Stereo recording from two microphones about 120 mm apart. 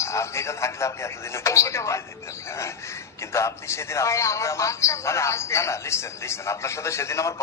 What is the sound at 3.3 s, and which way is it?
A man's voice, 25° left (ahead or behind).